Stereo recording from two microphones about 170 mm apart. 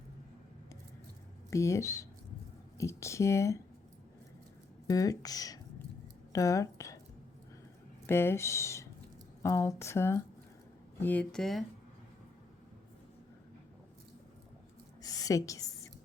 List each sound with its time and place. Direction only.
1.5 s speech: 15° left (ahead or behind)
4.9 s speech: 20° left (ahead or behind)
8.0 s speech: 15° left (ahead or behind)
15.0 s a sound: 20° left (ahead or behind)